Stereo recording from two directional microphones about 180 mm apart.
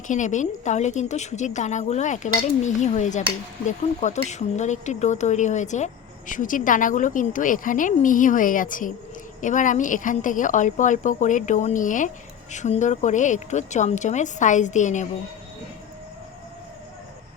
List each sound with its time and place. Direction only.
0.1 s a woman's voice: 45° left (ahead or behind)